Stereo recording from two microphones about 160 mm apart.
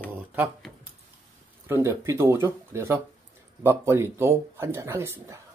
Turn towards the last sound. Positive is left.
turn(degrees=-15)  # may be behind; listen again after turning